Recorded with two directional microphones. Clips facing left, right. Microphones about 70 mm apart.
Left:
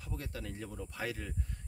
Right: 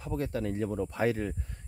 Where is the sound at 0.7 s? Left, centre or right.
Right.